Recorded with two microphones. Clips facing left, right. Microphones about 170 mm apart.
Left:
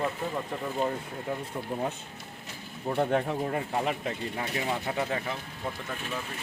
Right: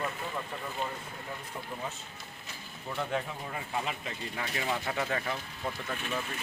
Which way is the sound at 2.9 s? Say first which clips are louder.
Left 7 dB; 55° left (ahead or behind).